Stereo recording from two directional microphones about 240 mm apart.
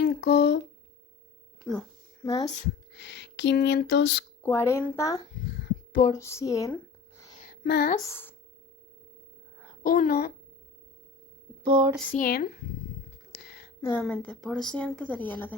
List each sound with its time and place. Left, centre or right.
0.0 s speech: left
1.7 s speech: centre
2.2 s speech: centre
2.9 s speech: left
4.4 s speech: centre
5.9 s a sound: left
6.1 s speech: centre
7.4 s a sound: left
7.9 s a woman's voice: centre
9.8 s a child's voice: left
11.6 s a sound: centre
12.1 s a child's voice: left
13.3 s a sound: left
13.9 s speech: centre